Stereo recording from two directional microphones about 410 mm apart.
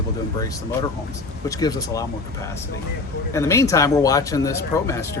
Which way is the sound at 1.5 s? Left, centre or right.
Centre.